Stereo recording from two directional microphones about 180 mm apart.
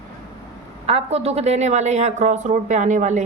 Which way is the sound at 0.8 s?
35° right (ahead or behind).